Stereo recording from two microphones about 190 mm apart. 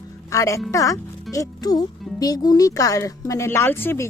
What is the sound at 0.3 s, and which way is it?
Speech, 15° left (ahead or behind).